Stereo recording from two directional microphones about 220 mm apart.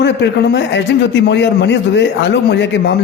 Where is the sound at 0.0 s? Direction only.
50° left (ahead or behind).